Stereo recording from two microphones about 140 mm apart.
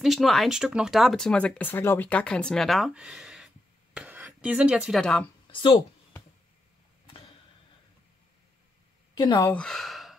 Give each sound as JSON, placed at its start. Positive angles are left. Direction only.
{"t": 0.0, "sound": "speech", "side_deg": 0}
{"t": 5.0, "sound": "speech", "side_deg": 10}
{"t": 5.5, "sound": "speech", "side_deg": 35}
{"t": 9.1, "sound": "speech", "side_deg": 30}
{"t": 9.6, "sound": "speech", "side_deg": 0}